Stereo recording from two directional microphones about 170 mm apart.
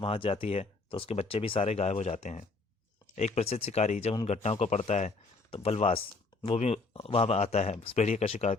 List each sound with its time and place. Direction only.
0.0 s speech: 35° left (ahead or behind)